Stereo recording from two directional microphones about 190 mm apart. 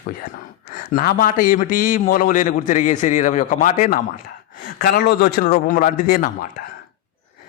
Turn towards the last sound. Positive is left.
turn(degrees=45)  # may be behind; listen again after turning